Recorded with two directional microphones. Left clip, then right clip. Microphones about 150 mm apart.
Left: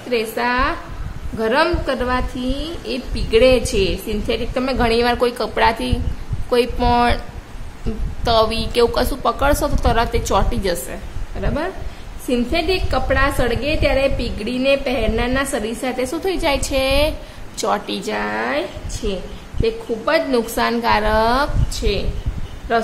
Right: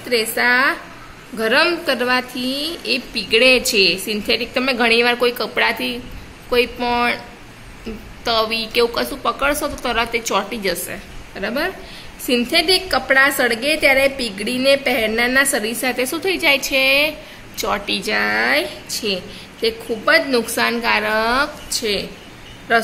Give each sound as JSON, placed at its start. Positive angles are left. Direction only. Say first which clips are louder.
{"t": 0.1, "sound": "a woman's voice", "louder": "right 3 dB", "side_deg": 5}
{"t": 8.2, "sound": "a woman's voice", "louder": "left 2 dB", "side_deg": 20}
{"t": 10.9, "sound": "a woman's voice", "louder": "right 1 dB", "side_deg": 0}